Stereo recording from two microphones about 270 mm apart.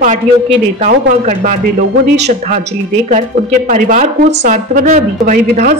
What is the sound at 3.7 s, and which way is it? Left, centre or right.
A woman's voice, right.